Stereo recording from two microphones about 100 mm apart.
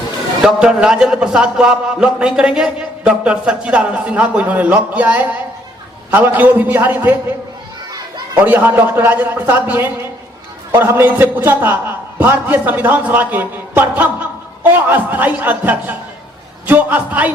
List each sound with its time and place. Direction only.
0.4 s a man's voice: 10° right (ahead or behind)
8.4 s a man's voice: 20° right (ahead or behind)